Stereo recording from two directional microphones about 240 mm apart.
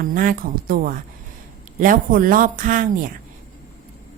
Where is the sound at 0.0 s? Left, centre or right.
Right.